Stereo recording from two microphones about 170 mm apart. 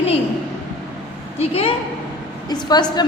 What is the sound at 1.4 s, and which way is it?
Speech, 35° left (ahead or behind).